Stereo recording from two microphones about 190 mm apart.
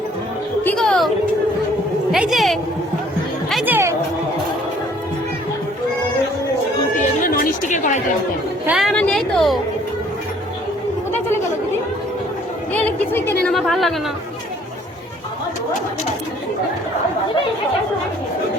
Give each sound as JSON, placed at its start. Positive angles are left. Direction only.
{"t": 0.6, "sound": "music", "side_deg": 5}
{"t": 2.1, "sound": "a sound", "side_deg": 0}
{"t": 3.5, "sound": "music", "side_deg": -10}
{"t": 7.0, "sound": "chatter", "side_deg": 45}
{"t": 8.6, "sound": "a sound", "side_deg": -5}
{"t": 12.7, "sound": "a woman's voice", "side_deg": 10}